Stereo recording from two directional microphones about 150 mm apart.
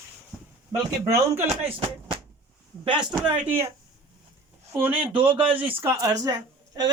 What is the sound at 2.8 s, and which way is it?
Speech, 30° right (ahead or behind).